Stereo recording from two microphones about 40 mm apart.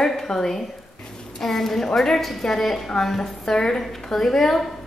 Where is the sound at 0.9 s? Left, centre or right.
Centre.